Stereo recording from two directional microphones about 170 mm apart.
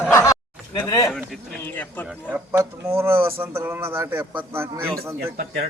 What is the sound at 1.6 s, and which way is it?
Speech, 10° left (ahead or behind).